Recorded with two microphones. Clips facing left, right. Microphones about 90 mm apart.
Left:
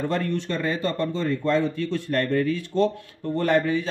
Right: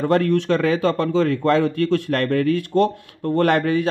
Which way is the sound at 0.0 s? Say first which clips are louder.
Right 8 dB; 65° right (ahead or behind).